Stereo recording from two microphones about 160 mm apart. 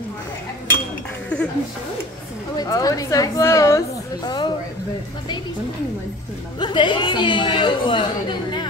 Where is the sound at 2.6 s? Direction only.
20° left (ahead or behind).